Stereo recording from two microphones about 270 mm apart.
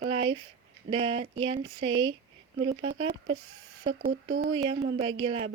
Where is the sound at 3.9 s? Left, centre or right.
Right.